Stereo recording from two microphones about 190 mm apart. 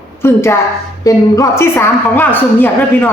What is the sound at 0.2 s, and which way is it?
A woman's voice, 15° left (ahead or behind).